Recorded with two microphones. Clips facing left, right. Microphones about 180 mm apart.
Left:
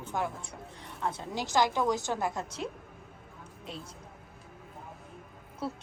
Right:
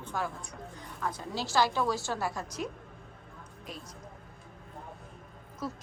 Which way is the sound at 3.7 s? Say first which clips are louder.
Left 2 dB; 25° left (ahead or behind).